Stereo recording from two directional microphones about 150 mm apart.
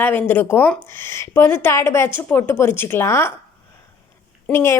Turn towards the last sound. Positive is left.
turn(degrees=15)  # may be behind; listen again after turning